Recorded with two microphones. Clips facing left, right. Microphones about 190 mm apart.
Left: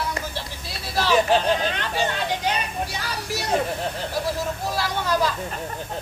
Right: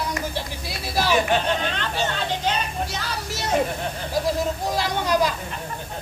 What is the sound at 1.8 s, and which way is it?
Speech, 10° left (ahead or behind).